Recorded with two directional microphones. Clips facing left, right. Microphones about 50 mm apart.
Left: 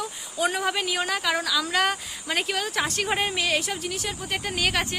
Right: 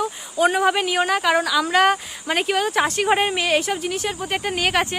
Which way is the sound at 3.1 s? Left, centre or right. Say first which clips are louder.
Right 6 dB; right.